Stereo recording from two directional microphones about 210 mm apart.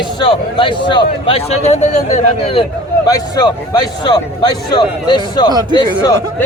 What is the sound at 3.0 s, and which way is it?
A man's voice, 15° left (ahead or behind).